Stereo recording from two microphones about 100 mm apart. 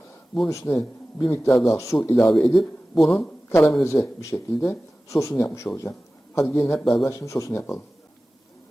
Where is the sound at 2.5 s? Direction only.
Centre (ahead or behind).